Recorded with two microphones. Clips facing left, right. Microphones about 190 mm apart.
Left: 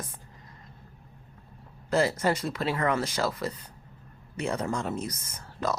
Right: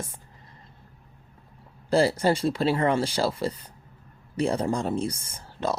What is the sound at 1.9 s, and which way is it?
Speech, 30° right (ahead or behind).